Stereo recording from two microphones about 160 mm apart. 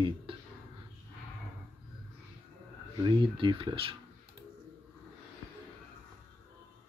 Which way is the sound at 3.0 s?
30° right (ahead or behind).